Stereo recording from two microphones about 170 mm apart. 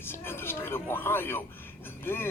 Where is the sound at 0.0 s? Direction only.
15° left (ahead or behind).